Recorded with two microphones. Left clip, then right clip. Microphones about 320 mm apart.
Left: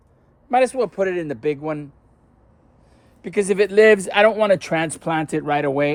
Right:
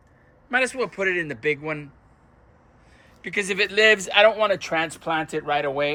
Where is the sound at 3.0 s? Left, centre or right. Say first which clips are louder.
Left 4 dB; centre.